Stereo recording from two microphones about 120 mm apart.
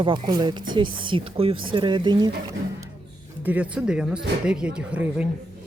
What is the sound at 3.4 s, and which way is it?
Speech, 15° right (ahead or behind).